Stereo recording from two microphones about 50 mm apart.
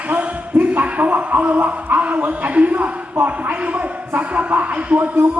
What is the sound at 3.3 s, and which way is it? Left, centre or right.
Music, right.